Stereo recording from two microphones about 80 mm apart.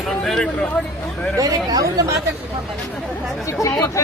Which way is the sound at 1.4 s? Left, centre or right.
Right.